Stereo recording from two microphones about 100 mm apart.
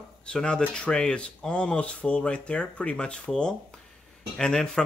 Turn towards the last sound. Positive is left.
turn(degrees=10)  # may be behind; listen again after turning